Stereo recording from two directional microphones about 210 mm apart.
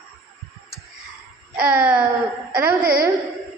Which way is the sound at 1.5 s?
5° right (ahead or behind).